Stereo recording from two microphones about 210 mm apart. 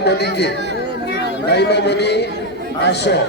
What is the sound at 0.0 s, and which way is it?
A man's voice, 50° left (ahead or behind).